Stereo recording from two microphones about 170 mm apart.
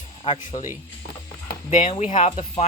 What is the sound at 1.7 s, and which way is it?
Speech, 45° left (ahead or behind).